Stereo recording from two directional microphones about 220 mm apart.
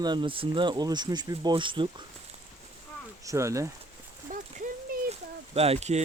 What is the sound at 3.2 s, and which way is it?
Speech, 15° right (ahead or behind).